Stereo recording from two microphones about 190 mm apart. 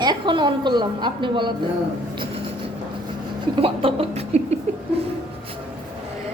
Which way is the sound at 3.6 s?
30° right (ahead or behind).